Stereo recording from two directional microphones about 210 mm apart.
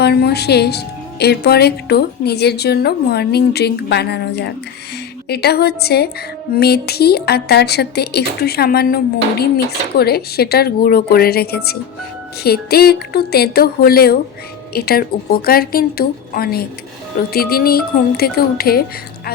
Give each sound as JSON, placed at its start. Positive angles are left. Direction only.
{"t": 0.0, "sound": "speech", "side_deg": 50}